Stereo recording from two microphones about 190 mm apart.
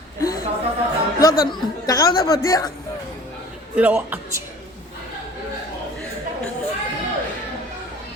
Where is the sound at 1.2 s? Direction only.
20° left (ahead or behind).